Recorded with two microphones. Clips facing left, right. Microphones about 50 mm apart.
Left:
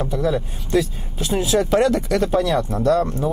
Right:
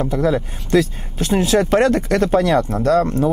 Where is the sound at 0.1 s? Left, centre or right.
Right.